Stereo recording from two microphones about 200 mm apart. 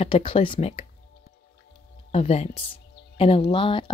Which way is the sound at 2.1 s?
30° left (ahead or behind).